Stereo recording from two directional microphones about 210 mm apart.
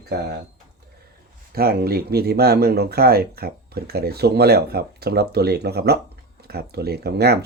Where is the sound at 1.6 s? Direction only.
45° right (ahead or behind).